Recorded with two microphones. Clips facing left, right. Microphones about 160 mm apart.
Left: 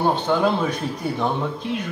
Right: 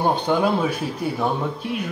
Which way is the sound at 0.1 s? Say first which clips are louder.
Even; 10° right (ahead or behind).